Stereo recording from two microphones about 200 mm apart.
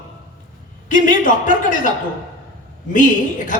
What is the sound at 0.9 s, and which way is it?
Speech, 40° left (ahead or behind).